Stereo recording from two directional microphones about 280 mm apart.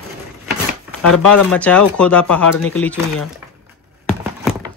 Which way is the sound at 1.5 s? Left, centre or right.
Centre.